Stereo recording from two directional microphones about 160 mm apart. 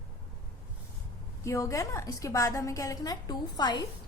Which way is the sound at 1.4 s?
20° left (ahead or behind).